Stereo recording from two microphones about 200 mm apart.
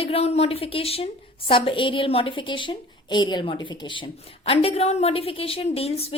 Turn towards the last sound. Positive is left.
turn(degrees=30)  # may be behind; listen again after turning